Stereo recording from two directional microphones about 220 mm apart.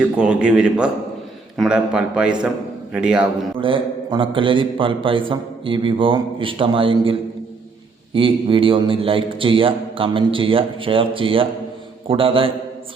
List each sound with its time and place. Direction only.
0.0 s a man's voice: 5° right (ahead or behind)
3.6 s a man's voice: 25° right (ahead or behind)